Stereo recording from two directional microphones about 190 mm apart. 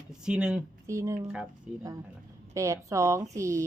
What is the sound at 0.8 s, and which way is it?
A woman's voice, 15° right (ahead or behind).